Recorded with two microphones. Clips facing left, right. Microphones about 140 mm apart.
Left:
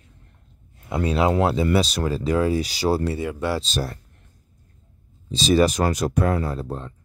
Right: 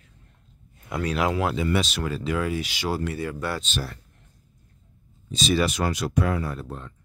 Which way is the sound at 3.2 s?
20° left (ahead or behind).